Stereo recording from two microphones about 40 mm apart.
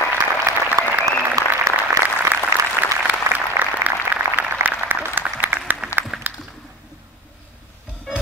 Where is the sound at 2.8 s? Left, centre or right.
Right.